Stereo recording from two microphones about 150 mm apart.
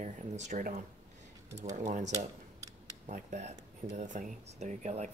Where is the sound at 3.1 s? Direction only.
55° right (ahead or behind).